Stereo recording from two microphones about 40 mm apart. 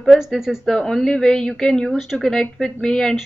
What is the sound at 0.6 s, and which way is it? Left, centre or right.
Speech, centre.